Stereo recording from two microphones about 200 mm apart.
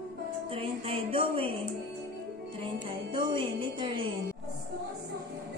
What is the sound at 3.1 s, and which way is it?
Speech, 25° right (ahead or behind).